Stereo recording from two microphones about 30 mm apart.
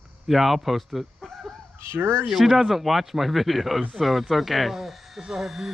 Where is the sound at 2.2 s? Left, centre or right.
Centre.